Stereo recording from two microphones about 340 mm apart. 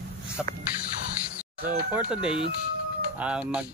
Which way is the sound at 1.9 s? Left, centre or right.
Centre.